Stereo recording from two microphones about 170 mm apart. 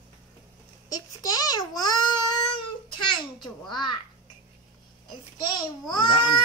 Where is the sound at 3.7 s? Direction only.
25° left (ahead or behind).